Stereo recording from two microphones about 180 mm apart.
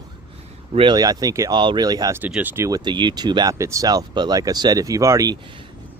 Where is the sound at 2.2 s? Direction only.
10° right (ahead or behind).